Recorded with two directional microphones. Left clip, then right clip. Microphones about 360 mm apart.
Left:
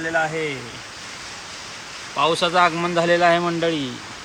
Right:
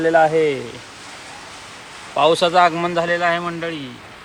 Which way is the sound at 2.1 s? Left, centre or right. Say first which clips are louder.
Right 4 dB; centre.